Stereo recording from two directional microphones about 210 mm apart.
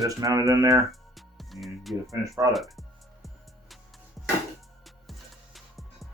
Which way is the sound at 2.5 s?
Centre (ahead or behind).